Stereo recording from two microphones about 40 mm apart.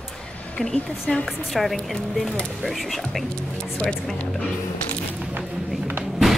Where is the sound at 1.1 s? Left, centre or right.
Left.